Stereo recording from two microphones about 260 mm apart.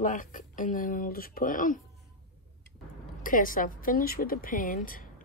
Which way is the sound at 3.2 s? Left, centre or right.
Left.